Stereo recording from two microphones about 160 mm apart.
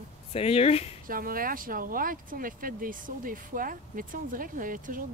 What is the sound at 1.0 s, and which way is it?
Speech, 60° right (ahead or behind).